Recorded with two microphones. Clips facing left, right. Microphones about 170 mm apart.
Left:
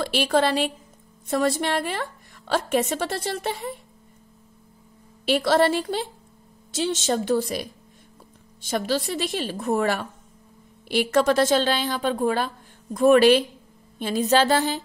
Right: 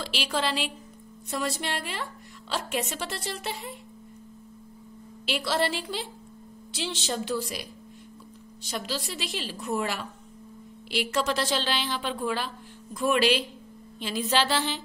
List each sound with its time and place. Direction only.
0.0 s a woman's voice: 50° left (ahead or behind)
5.2 s a woman's voice: 50° left (ahead or behind)